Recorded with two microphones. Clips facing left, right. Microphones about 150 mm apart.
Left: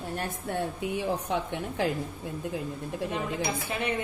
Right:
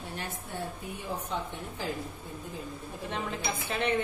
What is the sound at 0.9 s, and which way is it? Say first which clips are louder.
Speech: left 6 dB; 75° left (ahead or behind).